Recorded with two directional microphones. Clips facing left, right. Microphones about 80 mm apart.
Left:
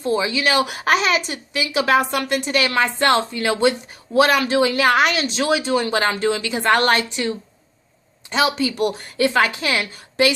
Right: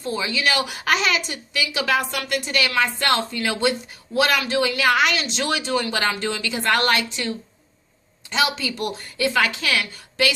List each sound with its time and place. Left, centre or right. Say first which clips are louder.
0.0 s a woman's voice: left 4 dB; left
4.7 s speech: left 3 dB; left
5.4 s a woman's voice: left 5 dB; left
8.4 s a woman's voice: left 4 dB; left